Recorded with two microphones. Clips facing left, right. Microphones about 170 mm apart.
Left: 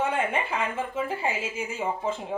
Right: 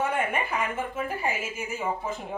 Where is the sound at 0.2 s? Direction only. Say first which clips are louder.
Left 1 dB; 25° left (ahead or behind).